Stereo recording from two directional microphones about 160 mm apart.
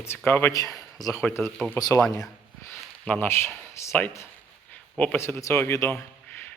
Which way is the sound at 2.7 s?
10° left (ahead or behind).